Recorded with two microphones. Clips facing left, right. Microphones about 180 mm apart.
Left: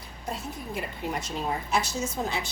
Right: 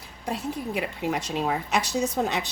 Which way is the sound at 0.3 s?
85° right.